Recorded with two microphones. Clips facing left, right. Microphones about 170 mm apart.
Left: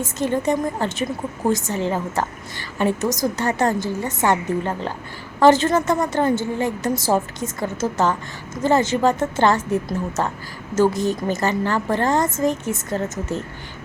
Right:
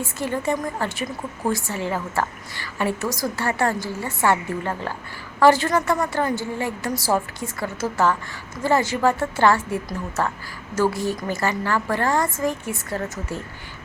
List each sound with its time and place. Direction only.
0.0 s a woman's voice: 20° left (ahead or behind)